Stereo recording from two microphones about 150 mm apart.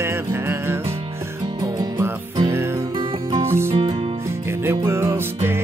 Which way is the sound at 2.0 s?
15° right (ahead or behind).